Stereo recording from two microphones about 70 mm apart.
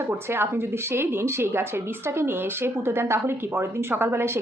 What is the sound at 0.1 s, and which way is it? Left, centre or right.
Speech, right.